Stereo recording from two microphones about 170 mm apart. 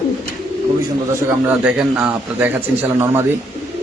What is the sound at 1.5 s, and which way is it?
A man's voice, 10° right (ahead or behind).